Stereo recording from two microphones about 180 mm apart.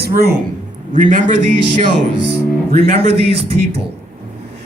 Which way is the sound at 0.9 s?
45° right (ahead or behind).